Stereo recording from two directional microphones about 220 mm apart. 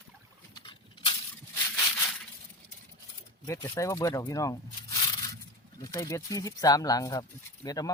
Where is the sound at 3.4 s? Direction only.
15° left (ahead or behind).